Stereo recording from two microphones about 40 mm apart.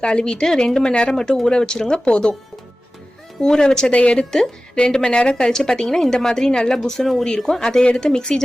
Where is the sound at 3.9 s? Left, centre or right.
Left.